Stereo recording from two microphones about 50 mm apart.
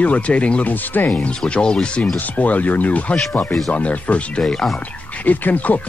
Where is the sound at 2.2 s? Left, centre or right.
Left.